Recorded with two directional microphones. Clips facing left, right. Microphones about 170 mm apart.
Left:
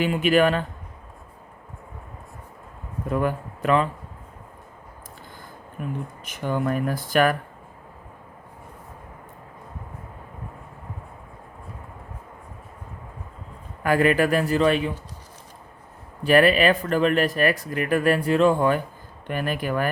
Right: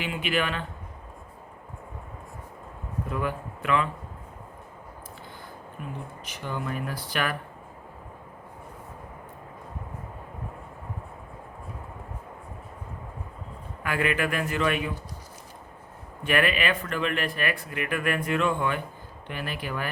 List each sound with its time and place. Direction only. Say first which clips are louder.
0.0 s speech: left 9 dB; 45° left (ahead or behind)
3.1 s a man's voice: left 7 dB; 45° left (ahead or behind)
5.8 s speech: left 7 dB; 50° left (ahead or behind)
13.8 s speech: left 8 dB; 40° left (ahead or behind)
16.2 s speech: left 8 dB; 35° left (ahead or behind)